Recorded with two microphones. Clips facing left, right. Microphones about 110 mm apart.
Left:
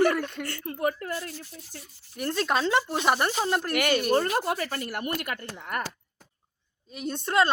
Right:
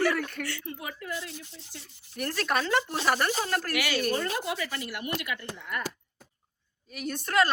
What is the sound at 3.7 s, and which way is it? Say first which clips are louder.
A woman's voice: left 5 dB; 55° left (ahead or behind).